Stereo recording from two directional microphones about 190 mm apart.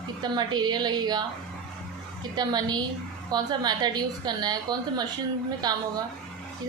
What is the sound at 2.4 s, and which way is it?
A woman's voice, 20° right (ahead or behind).